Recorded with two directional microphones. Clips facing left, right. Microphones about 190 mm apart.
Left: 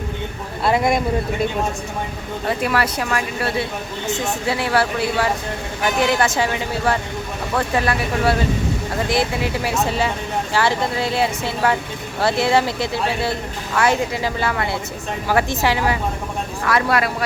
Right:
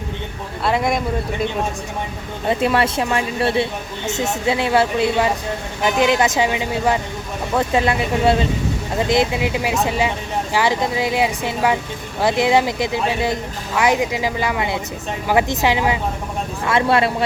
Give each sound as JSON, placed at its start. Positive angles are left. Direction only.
{"t": 0.6, "sound": "a man's voice", "side_deg": 0}
{"t": 2.5, "sound": "speech", "side_deg": -25}